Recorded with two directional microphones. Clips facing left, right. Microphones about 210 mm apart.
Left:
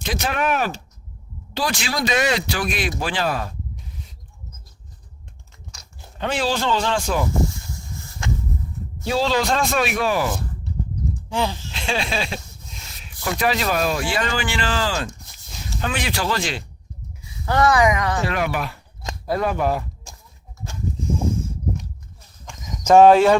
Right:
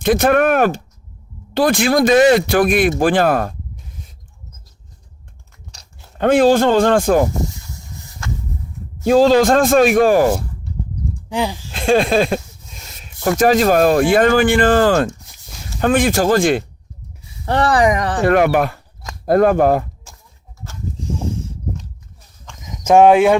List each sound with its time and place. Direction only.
0.0 s speech: 55° right (ahead or behind)
5.7 s a sound: 35° right (ahead or behind)
6.1 s speech: 50° right (ahead or behind)
7.4 s a sound: 15° right (ahead or behind)
9.0 s speech: 45° right (ahead or behind)
11.3 s speech: 15° right (ahead or behind)
11.7 s speech: 50° right (ahead or behind)
17.4 s speech: 30° right (ahead or behind)
18.2 s speech: 55° right (ahead or behind)
22.6 s speech: 10° right (ahead or behind)